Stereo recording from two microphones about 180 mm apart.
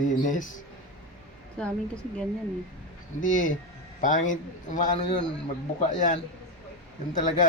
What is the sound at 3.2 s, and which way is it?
Speech, 45° left (ahead or behind).